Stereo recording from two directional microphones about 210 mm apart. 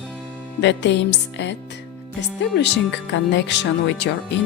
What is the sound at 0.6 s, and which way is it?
Speech, 55° left (ahead or behind).